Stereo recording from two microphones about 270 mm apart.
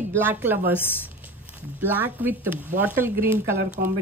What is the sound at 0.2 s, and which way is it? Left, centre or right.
Speech, centre.